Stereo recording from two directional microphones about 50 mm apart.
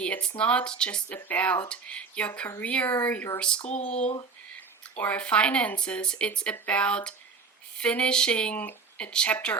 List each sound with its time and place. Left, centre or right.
0.0 s speech: left
1.1 s speech: left
3.4 s speech: left